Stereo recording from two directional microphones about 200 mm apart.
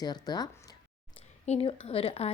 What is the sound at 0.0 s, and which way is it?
A woman's voice, 20° left (ahead or behind).